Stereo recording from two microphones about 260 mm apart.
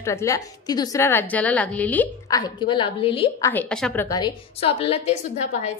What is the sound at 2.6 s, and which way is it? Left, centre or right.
Speech, centre.